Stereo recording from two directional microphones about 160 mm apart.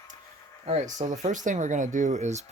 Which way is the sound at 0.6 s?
45° right (ahead or behind).